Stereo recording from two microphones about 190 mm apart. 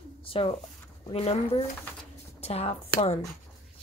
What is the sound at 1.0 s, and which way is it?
Speech, 30° left (ahead or behind).